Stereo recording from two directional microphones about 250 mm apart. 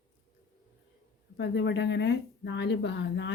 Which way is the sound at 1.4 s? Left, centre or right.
Left.